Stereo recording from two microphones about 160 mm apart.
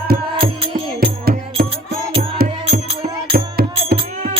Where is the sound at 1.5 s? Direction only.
35° right (ahead or behind).